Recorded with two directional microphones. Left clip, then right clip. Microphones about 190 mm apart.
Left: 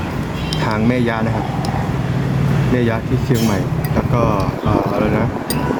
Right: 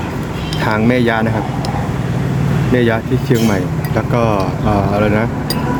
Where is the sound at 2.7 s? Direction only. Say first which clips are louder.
Right 5 dB; centre (ahead or behind).